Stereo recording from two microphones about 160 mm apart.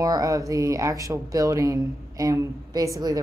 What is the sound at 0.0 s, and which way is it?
Speech, 20° right (ahead or behind).